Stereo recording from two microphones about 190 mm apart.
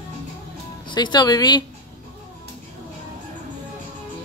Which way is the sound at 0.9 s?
25° left (ahead or behind).